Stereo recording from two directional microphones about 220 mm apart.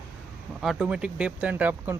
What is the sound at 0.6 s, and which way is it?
Speech, centre (ahead or behind).